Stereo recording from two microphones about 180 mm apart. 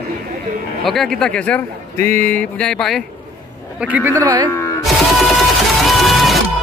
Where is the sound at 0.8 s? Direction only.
Centre (ahead or behind).